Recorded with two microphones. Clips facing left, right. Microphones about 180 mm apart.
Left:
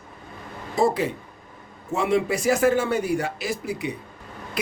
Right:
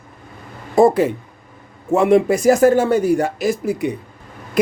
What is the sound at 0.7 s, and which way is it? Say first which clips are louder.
Speech: right 9 dB; 50° right (ahead or behind).